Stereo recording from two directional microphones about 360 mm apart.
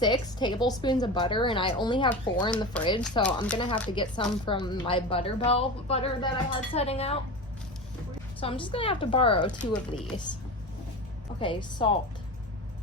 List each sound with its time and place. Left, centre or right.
0.0 s a woman's voice: centre
8.4 s a woman's voice: centre
11.3 s a woman's voice: centre